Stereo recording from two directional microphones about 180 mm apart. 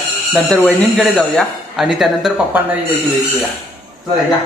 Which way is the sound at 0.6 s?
Centre (ahead or behind).